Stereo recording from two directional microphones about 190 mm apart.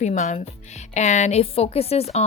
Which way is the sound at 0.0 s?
40° left (ahead or behind).